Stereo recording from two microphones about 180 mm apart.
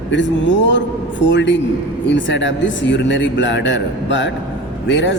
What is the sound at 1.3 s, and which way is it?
A man's voice, 90° left.